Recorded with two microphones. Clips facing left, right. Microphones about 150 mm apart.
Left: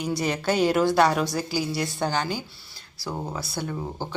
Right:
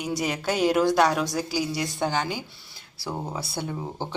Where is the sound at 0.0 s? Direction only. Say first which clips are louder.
Left 1 dB; 15° right (ahead or behind).